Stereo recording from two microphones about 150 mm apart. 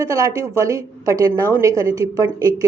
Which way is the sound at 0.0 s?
20° right (ahead or behind).